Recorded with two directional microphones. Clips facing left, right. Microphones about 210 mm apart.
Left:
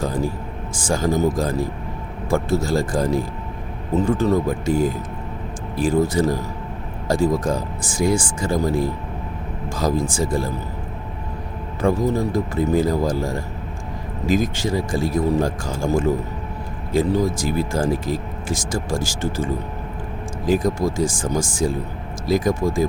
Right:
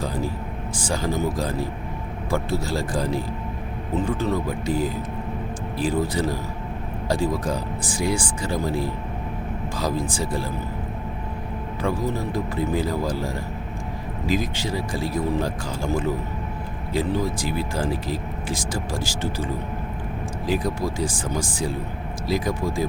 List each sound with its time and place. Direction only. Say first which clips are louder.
0.7 s speech: left 5 dB; 45° left (ahead or behind)
11.8 s speech: left 6 dB; 45° left (ahead or behind)
20.5 s speech: left 6 dB; 45° left (ahead or behind)